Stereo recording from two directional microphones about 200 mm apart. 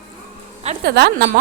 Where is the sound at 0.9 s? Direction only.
55° right (ahead or behind).